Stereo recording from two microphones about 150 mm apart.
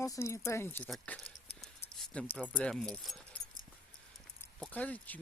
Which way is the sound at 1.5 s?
40° left (ahead or behind).